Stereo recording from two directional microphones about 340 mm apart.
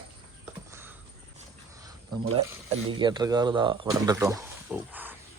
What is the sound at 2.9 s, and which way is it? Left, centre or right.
Speech, centre.